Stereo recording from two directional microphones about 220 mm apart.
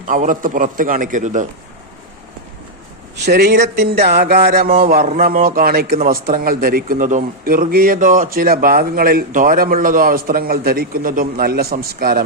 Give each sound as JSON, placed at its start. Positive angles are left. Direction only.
{"t": 0.1, "sound": "speech", "side_deg": -35}
{"t": 3.2, "sound": "speech", "side_deg": -50}